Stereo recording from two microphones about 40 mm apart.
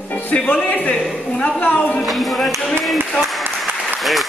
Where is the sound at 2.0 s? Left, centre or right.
Centre.